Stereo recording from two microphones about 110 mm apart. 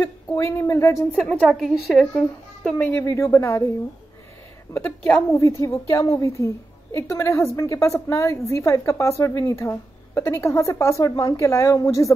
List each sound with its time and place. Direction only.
0.0 s a woman's voice: 25° left (ahead or behind)
1.4 s a woman's voice: 5° right (ahead or behind)
2.8 s a woman's voice: 25° left (ahead or behind)
4.7 s a woman's voice: 15° left (ahead or behind)
5.3 s a woman's voice: 30° left (ahead or behind)